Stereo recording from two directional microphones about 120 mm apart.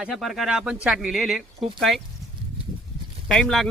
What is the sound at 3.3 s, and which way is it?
Speech, 5° left (ahead or behind).